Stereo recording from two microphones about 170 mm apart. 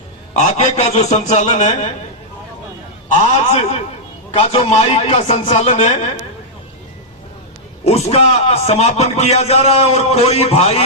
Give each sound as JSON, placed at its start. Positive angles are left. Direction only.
{"t": 0.3, "sound": "a man's voice", "side_deg": 40}
{"t": 3.2, "sound": "a man's voice", "side_deg": 40}
{"t": 7.9, "sound": "a man's voice", "side_deg": 40}